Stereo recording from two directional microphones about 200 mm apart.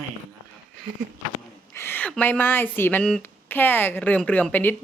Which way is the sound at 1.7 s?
10° left (ahead or behind).